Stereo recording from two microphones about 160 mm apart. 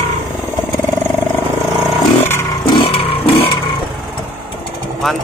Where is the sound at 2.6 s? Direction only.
30° left (ahead or behind).